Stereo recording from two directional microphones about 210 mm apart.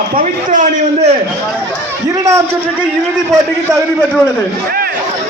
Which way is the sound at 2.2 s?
15° right (ahead or behind).